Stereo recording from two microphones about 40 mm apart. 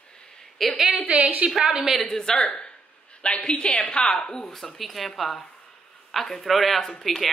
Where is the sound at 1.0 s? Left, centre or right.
Right.